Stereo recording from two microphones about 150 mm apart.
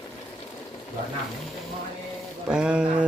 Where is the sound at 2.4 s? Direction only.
5° right (ahead or behind).